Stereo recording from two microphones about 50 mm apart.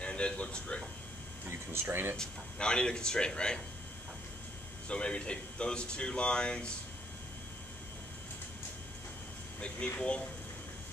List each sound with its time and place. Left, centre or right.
0.0 s a sound: left
1.7 s speech: right
2.1 s speech: centre
4.8 s speech: left
9.9 s speech: left